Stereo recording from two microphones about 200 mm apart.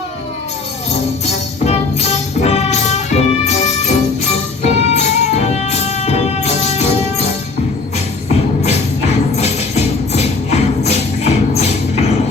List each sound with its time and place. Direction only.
1.2 s music: 35° left (ahead or behind)
7.9 s music: 35° left (ahead or behind)